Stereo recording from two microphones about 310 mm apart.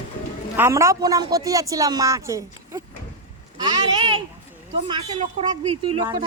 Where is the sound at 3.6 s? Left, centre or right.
Centre.